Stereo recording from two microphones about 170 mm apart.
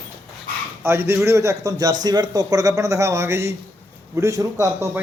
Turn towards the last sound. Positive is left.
turn(degrees=-20)  # may be behind; listen again after turning